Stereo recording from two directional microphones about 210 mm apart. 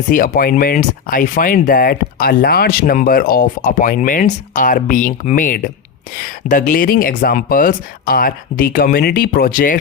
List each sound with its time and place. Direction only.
0.1 s speech: 45° left (ahead or behind)